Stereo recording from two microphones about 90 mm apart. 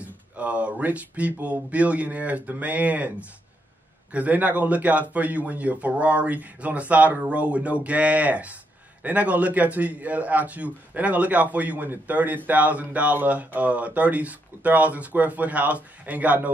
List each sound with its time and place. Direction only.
0.0 s speech: 15° right (ahead or behind)